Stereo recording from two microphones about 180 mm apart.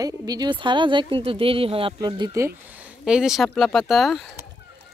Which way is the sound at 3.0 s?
5° right (ahead or behind).